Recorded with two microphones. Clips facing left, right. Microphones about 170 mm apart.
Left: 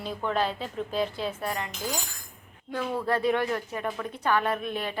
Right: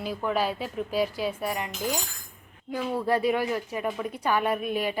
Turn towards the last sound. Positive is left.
turn(degrees=-10)  # may be behind; listen again after turning